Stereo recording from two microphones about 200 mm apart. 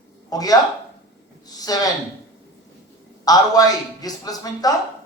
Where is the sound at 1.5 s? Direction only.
20° left (ahead or behind).